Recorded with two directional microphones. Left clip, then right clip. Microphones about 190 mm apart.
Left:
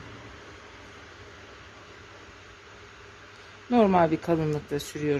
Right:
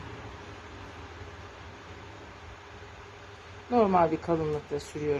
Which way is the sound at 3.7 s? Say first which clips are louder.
Left 2 dB; 45° left (ahead or behind).